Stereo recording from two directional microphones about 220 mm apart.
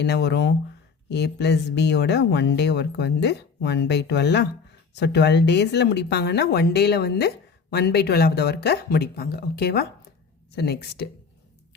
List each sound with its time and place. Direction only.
0.0 s speech: 50° left (ahead or behind)